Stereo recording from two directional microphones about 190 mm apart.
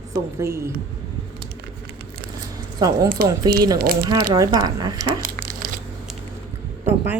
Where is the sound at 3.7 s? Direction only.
55° right (ahead or behind).